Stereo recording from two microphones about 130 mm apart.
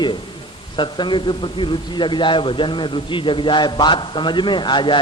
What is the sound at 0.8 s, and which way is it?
Speech, 35° left (ahead or behind).